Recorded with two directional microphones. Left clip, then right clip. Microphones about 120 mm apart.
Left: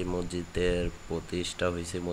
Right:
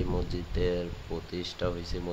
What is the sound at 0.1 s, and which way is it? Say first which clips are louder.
Speech: left 1 dB; 25° left (ahead or behind).